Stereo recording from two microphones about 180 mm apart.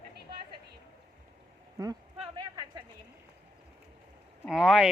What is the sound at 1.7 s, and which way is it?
Speech, 20° right (ahead or behind).